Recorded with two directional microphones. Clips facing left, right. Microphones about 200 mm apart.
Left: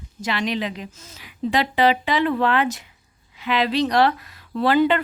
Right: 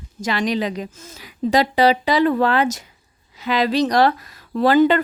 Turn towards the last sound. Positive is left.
turn(degrees=-45)  # may be behind; listen again after turning